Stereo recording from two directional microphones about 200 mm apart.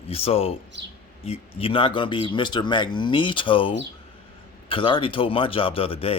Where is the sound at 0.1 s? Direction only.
30° left (ahead or behind).